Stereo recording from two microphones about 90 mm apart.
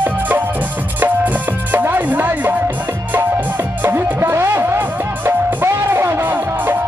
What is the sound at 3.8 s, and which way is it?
Music, 25° right (ahead or behind).